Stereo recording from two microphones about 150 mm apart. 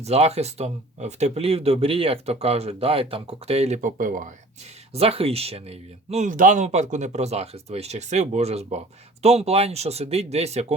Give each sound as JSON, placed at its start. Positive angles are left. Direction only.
{"t": 0.0, "sound": "speech", "side_deg": -45}
{"t": 4.9, "sound": "speech", "side_deg": -40}